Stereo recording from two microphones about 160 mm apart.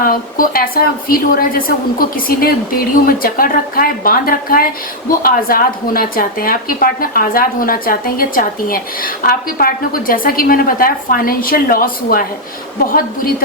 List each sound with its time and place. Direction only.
0.0 s speech: 65° left (ahead or behind)